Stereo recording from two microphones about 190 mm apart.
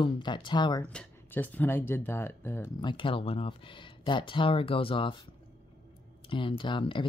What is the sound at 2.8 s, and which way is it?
Speech, 25° left (ahead or behind).